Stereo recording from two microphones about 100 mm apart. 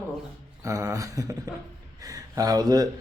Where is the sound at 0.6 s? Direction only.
35° right (ahead or behind).